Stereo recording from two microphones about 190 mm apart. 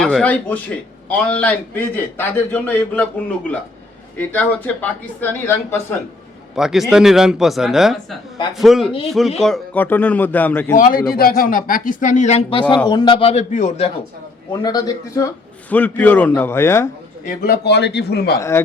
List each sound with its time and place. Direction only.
0.0 s a man's voice: 5° left (ahead or behind)
4.2 s a man's voice: 10° left (ahead or behind)
6.6 s a man's voice: 5° right (ahead or behind)
10.8 s a man's voice: 50° left (ahead or behind); by 13.9 s 35° left (ahead or behind)
14.5 s speech: 20° left (ahead or behind)
15.7 s a man's voice: 10° left (ahead or behind)
17.2 s a man's voice: 55° left (ahead or behind)
18.3 s a man's voice: 15° left (ahead or behind)